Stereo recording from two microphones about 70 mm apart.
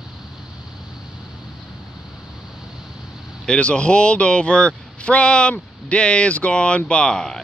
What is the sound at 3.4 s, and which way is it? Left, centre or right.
Speech, centre.